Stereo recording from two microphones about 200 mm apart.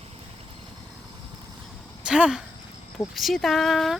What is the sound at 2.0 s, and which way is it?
Speech, 5° right (ahead or behind).